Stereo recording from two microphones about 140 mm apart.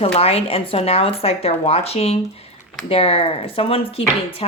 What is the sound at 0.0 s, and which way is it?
A woman's voice, 45° left (ahead or behind).